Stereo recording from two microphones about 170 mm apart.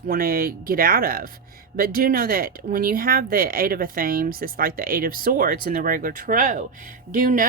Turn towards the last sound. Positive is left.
turn(degrees=-50)  # may be behind; listen again after turning